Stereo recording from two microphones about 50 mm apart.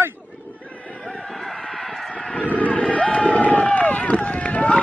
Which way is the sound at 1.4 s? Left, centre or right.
Centre.